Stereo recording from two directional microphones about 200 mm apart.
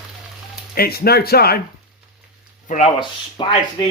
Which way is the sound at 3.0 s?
25° left (ahead or behind).